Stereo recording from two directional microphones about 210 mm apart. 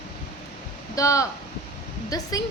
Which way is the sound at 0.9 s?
15° left (ahead or behind).